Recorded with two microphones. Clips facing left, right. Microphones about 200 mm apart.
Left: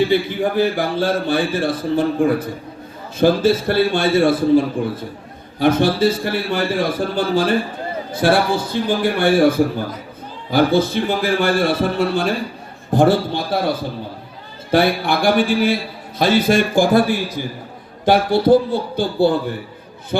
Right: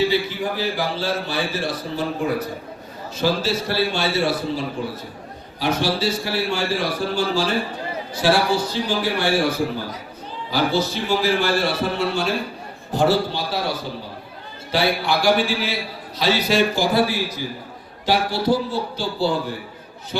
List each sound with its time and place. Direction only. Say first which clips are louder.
0.0 s a man's voice: left 4 dB; 55° left (ahead or behind)